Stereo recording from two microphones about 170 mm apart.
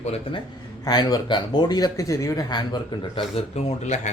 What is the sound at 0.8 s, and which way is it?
Speech, 25° left (ahead or behind).